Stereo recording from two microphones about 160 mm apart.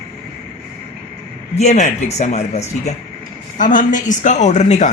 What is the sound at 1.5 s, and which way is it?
A woman's voice, 45° left (ahead or behind).